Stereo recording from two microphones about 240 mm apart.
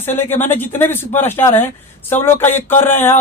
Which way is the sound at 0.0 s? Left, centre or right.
Centre.